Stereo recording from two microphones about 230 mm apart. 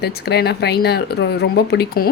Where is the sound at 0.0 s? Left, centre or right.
Left.